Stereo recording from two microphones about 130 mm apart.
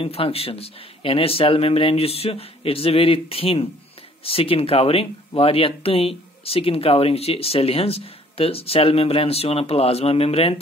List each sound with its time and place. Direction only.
0.0 s speech: 45° left (ahead or behind)